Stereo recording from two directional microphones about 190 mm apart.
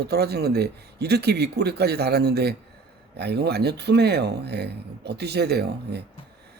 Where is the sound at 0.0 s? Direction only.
55° right (ahead or behind).